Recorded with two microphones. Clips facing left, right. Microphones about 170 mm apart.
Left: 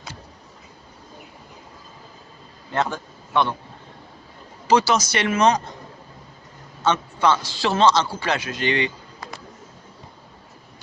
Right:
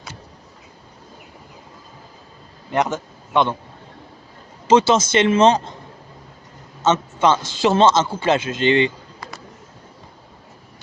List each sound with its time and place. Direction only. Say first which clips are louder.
2.7 s a man's voice: right 4 dB; 20° right (ahead or behind)
4.7 s speech: right 4 dB; 25° right (ahead or behind)
6.8 s a man's voice: right 3 dB; 20° right (ahead or behind)